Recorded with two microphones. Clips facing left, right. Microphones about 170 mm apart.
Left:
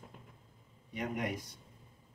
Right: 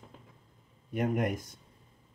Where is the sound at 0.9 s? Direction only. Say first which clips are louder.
Right 7 dB; 50° right (ahead or behind).